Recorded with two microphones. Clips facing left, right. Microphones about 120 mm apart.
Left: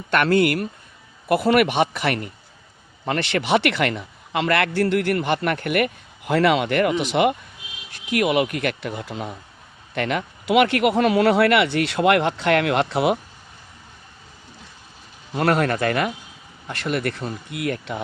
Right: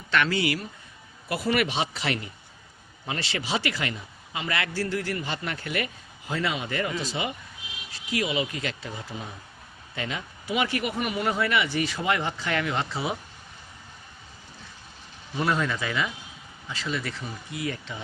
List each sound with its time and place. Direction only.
0.1 s a man's voice: 55° left (ahead or behind)
15.4 s a man's voice: 65° left (ahead or behind)